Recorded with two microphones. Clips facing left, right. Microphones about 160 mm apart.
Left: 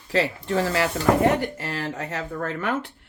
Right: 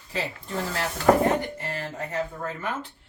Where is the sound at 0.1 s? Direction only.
80° left.